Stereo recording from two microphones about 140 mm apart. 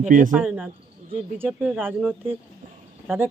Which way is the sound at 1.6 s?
Centre (ahead or behind).